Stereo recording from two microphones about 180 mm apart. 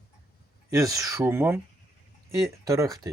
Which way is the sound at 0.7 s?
20° right (ahead or behind).